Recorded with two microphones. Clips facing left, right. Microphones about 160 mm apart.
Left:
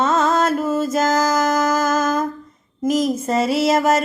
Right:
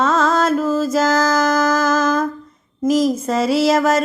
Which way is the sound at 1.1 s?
20° left (ahead or behind).